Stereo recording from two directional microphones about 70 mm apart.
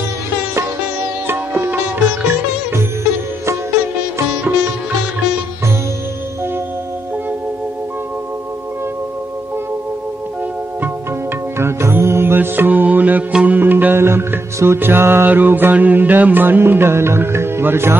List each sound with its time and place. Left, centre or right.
1.2 s sitar: right
2.2 s music: right
11.5 s music: right; by 13.6 s centre
13.6 s music: right